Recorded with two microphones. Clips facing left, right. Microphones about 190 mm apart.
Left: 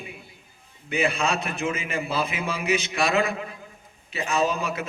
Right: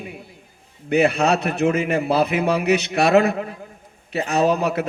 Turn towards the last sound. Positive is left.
turn(degrees=-60)  # may be behind; listen again after turning